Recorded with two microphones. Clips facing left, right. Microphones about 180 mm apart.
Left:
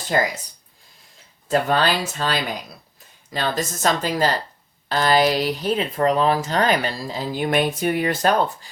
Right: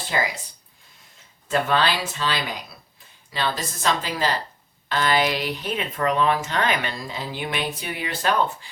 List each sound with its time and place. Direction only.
0.1 s speech: 45° left (ahead or behind)
1.5 s speech: 40° left (ahead or behind)